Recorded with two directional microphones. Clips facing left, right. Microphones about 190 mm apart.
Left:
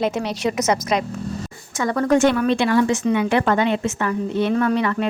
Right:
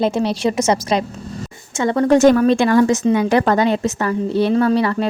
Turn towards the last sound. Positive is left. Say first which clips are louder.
# right 4 dB
turn(degrees=-35)  # may be behind; listen again after turning